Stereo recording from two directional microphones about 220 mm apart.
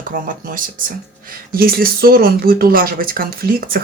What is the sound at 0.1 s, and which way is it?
Speech, 40° right (ahead or behind).